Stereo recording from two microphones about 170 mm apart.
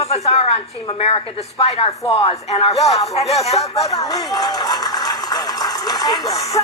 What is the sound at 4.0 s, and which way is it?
Speech, 20° left (ahead or behind).